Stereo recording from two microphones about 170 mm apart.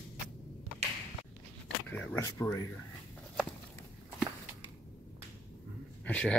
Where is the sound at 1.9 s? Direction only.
15° left (ahead or behind).